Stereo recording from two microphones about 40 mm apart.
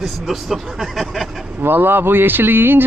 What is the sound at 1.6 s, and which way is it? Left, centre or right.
Speech, right.